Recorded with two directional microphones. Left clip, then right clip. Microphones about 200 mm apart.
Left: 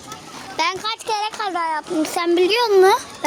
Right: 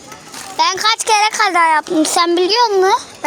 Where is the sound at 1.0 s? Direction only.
25° right (ahead or behind).